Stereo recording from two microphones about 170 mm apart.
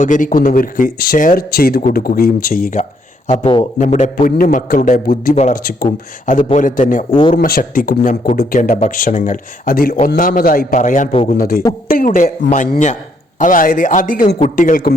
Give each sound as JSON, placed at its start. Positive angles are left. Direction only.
{"t": 0.0, "sound": "speech", "side_deg": 50}
{"t": 3.2, "sound": "speech", "side_deg": 35}
{"t": 3.8, "sound": "speech", "side_deg": 45}
{"t": 11.1, "sound": "speech", "side_deg": 35}
{"t": 11.3, "sound": "speech", "side_deg": 60}
{"t": 13.4, "sound": "speech", "side_deg": 55}